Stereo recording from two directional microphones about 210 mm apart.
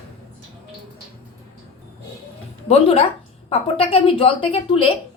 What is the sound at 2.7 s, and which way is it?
A woman's voice, 25° left (ahead or behind).